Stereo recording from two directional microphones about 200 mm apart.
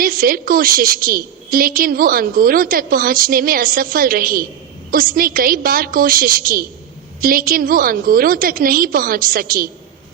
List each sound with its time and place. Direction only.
0.0 s a woman's voice: 45° right (ahead or behind)